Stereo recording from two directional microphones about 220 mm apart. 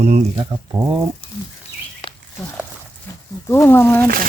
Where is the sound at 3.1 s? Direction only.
10° left (ahead or behind).